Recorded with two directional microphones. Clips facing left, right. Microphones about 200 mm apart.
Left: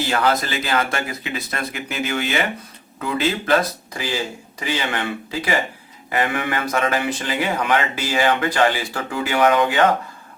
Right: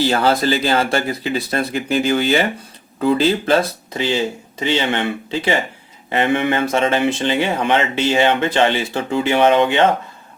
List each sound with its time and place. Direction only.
0.0 s speech: 30° right (ahead or behind)